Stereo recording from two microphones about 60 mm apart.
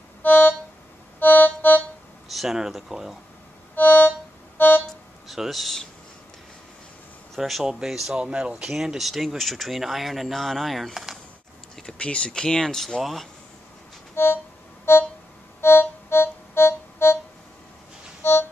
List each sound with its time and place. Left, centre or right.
0.2 s music: left
2.2 s speech: centre
3.7 s music: left
5.3 s speech: centre
7.3 s speech: centre
12.0 s speech: centre
14.1 s music: left
15.6 s music: left
18.2 s music: left